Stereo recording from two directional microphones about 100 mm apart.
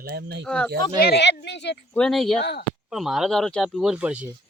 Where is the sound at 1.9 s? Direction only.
5° left (ahead or behind).